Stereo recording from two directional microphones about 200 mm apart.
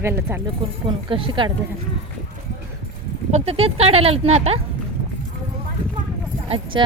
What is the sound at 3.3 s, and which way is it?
Speech, 35° right (ahead or behind).